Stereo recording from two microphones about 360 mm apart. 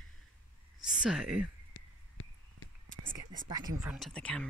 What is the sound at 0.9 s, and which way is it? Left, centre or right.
Speech, centre.